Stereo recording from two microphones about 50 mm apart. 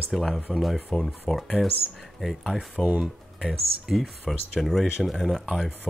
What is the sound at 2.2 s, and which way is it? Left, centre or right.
Speech, centre.